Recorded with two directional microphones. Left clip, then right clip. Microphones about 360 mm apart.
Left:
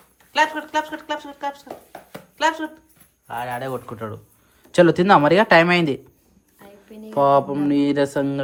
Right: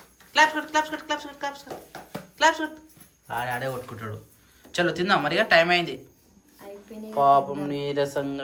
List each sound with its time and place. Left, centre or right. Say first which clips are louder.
0.3 s speech: left 1 dB; centre
2.1 s a sound: even; centre
3.2 s speech: left 2 dB; centre
7.2 s mantra: left 3 dB; left